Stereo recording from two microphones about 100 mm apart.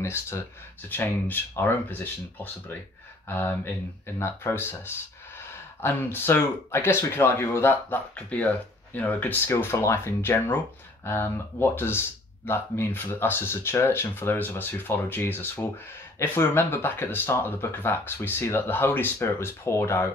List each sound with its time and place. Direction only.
0.0 s speech: 25° left (ahead or behind)